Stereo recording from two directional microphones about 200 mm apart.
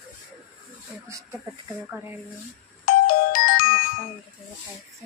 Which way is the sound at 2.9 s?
45° left (ahead or behind).